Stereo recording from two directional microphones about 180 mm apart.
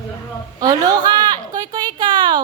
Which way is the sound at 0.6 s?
20° right (ahead or behind).